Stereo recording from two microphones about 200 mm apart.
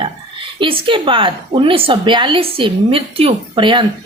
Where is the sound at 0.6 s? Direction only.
25° right (ahead or behind).